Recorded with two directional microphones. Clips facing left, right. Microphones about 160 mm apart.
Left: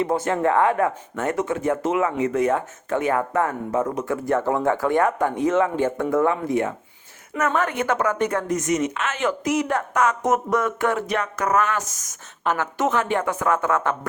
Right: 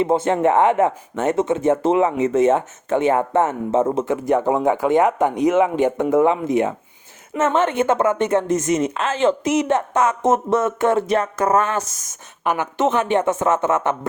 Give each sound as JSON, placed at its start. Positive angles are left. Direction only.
{"t": 0.0, "sound": "speech", "side_deg": -25}